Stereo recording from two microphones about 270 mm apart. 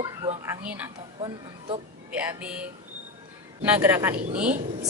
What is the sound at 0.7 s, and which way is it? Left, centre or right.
Speech, centre.